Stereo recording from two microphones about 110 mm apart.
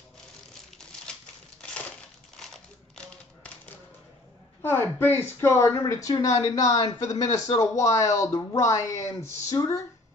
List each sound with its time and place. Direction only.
4.6 s speech: 20° left (ahead or behind)